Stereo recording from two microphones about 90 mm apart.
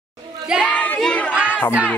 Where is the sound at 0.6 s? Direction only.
15° left (ahead or behind).